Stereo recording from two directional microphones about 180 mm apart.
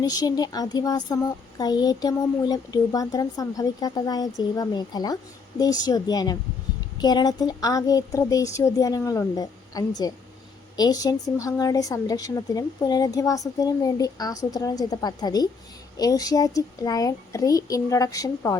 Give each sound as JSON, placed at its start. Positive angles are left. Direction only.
{"t": 0.0, "sound": "speech", "side_deg": 20}